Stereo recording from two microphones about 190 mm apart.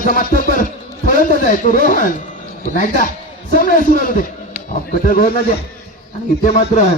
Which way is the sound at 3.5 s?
45° left (ahead or behind).